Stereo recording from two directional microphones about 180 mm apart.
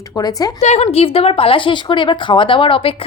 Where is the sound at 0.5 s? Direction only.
35° left (ahead or behind).